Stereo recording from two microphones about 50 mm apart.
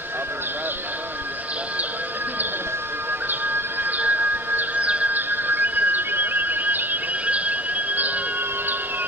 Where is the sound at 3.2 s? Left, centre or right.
Right.